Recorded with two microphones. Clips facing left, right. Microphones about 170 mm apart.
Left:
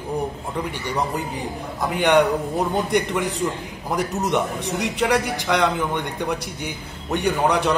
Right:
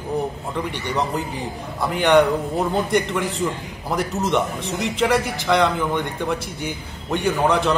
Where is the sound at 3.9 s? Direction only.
10° left (ahead or behind).